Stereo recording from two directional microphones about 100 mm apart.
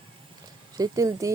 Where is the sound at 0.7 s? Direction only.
35° right (ahead or behind).